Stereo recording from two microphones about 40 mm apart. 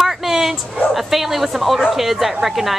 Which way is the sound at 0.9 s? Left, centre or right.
Centre.